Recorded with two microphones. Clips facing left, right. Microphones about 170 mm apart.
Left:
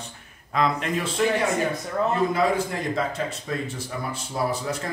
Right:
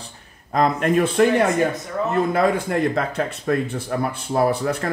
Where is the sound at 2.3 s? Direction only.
60° right (ahead or behind).